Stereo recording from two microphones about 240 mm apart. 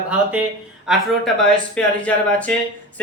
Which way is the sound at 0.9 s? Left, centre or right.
Centre.